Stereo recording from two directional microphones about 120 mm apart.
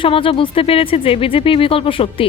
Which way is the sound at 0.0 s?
50° left (ahead or behind).